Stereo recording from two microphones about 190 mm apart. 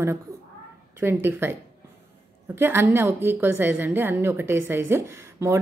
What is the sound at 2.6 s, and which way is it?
Speech, 10° right (ahead or behind).